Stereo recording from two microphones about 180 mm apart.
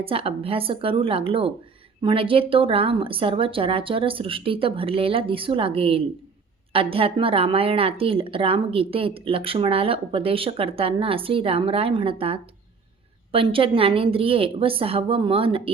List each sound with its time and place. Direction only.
0.0 s speech: 30° right (ahead or behind)